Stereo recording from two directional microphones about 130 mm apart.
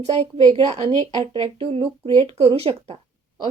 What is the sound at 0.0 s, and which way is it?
A woman's voice, 55° right (ahead or behind).